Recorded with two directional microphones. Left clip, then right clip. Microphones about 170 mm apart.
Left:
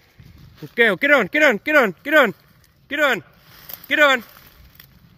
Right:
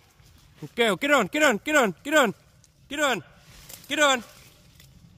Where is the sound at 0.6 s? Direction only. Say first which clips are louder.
Left 7 dB; 10° right (ahead or behind).